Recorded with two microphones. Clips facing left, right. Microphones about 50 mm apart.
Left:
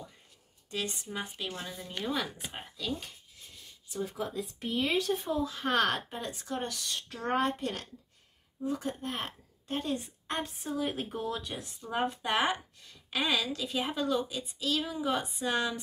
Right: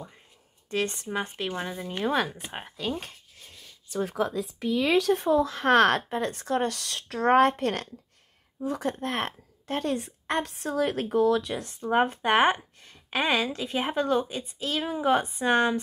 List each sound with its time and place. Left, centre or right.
0.7 s a woman's voice: right
8.6 s a woman's voice: right
11.6 s speech: right